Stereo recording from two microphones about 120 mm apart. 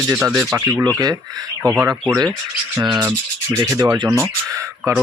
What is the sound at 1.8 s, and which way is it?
Speech, 15° right (ahead or behind).